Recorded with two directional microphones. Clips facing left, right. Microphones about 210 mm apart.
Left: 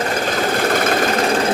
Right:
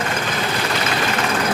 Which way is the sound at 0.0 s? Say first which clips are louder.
Left 4 dB; 40° left (ahead or behind).